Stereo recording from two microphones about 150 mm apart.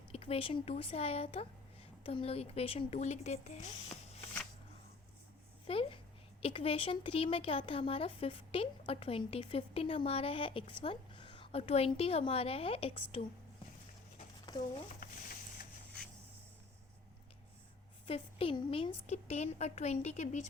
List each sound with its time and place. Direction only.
0.1 s speech: 40° left (ahead or behind)
5.6 s speech: 40° left (ahead or behind)
14.5 s speech: 30° left (ahead or behind)
15.0 s a sound: 75° left (ahead or behind)
18.0 s a woman's voice: 40° left (ahead or behind)